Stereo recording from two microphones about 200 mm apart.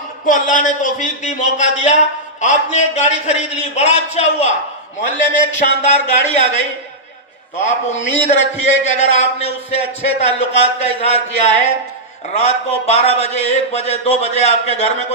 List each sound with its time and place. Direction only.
0.3 s a man's voice: 40° left (ahead or behind)
7.6 s a man's voice: 35° left (ahead or behind)